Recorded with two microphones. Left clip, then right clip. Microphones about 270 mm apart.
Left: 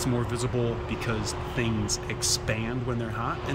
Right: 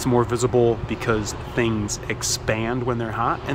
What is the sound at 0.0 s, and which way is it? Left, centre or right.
Speech, centre.